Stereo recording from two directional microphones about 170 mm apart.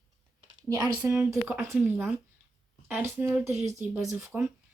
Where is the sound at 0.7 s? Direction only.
20° right (ahead or behind).